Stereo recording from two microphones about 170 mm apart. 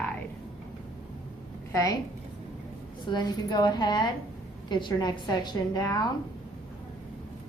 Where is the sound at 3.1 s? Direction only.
25° left (ahead or behind).